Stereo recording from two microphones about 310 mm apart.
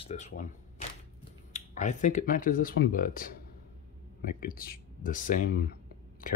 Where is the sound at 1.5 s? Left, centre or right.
Left.